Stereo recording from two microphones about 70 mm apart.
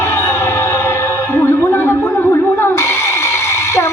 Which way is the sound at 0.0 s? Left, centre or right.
Left.